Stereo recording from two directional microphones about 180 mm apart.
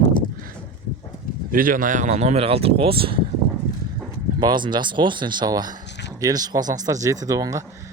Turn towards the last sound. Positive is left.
turn(degrees=-15)  # may be behind; listen again after turning